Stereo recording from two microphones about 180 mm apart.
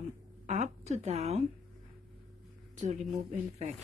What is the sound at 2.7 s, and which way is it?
Speech, 40° right (ahead or behind).